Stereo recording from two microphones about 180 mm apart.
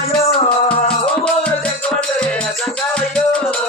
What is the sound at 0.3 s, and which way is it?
Music, 35° left (ahead or behind).